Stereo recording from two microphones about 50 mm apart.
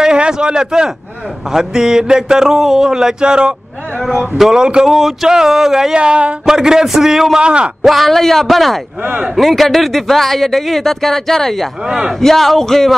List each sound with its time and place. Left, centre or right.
0.0 s a sound: centre
1.5 s speech: centre
4.8 s speech: centre
5.3 s speech: centre
5.9 s speech: centre
7.4 s speech: right
7.8 s speech: centre